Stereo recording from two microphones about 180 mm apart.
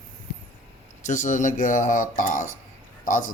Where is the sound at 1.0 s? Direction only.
45° left (ahead or behind).